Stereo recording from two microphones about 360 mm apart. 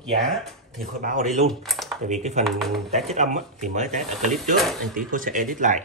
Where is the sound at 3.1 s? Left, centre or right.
Centre.